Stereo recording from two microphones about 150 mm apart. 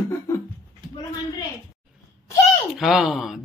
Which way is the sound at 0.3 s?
20° left (ahead or behind).